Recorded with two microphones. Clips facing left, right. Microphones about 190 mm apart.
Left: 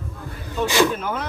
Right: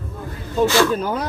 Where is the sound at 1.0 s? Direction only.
35° right (ahead or behind).